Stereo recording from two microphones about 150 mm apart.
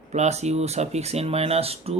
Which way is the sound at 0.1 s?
45° right (ahead or behind).